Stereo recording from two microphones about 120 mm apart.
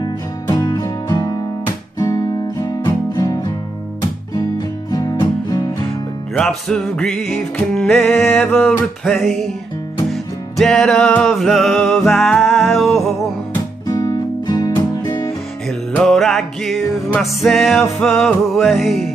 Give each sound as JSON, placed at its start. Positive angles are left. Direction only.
{"t": 0.0, "sound": "music", "side_deg": 30}
{"t": 2.0, "sound": "guitar", "side_deg": 30}
{"t": 6.3, "sound": "music", "side_deg": 10}
{"t": 10.6, "sound": "music", "side_deg": 5}
{"t": 13.8, "sound": "guitar", "side_deg": 25}
{"t": 14.4, "sound": "music", "side_deg": 30}
{"t": 16.0, "sound": "music", "side_deg": 5}